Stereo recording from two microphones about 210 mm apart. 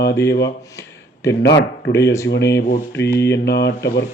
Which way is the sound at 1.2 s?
55° left (ahead or behind).